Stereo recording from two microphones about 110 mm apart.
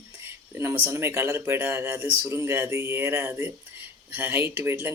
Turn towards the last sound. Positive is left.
turn(degrees=-20)  # may be behind; listen again after turning